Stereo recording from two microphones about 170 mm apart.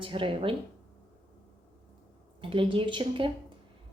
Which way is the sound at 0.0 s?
30° right (ahead or behind).